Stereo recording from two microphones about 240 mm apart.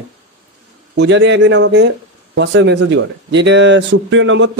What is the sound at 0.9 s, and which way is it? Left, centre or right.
Speech, right.